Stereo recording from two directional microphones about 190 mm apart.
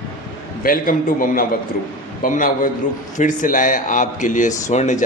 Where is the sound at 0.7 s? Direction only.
45° left (ahead or behind).